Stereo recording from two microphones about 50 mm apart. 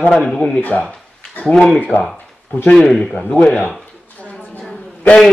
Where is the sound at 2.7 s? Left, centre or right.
Centre.